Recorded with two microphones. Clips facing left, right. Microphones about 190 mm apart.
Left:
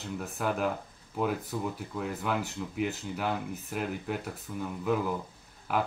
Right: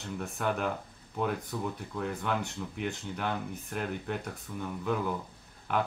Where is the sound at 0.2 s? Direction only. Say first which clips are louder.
Left 1 dB; 5° left (ahead or behind).